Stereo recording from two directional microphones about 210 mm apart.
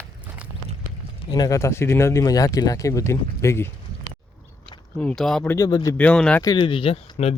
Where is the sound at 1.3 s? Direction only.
15° left (ahead or behind).